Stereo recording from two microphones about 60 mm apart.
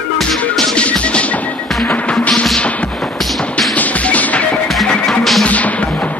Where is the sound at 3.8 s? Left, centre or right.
Left.